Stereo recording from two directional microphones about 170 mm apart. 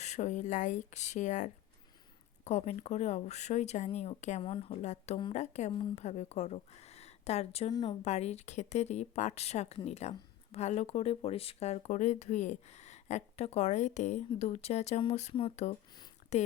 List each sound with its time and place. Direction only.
0.0 s a woman's voice: 45° left (ahead or behind)
7.7 s a woman's voice: 25° left (ahead or behind)
8.0 s speech: 40° left (ahead or behind)